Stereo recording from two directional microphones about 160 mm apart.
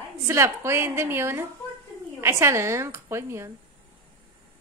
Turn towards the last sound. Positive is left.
turn(degrees=-15)  # may be behind; listen again after turning